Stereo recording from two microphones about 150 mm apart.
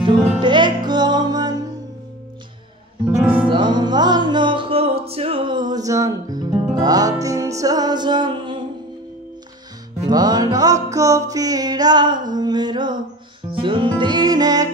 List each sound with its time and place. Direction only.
0.0 s music: 30° right (ahead or behind)
3.3 s music: 30° right (ahead or behind)
10.0 s music: 25° right (ahead or behind)
12.3 s a sound: 30° right (ahead or behind)
13.5 s music: 35° right (ahead or behind)